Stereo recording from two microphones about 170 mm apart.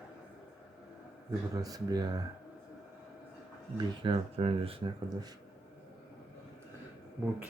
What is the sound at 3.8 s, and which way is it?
Speech, 30° right (ahead or behind).